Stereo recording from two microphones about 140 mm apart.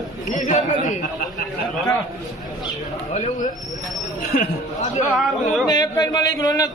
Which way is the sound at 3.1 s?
55° left (ahead or behind).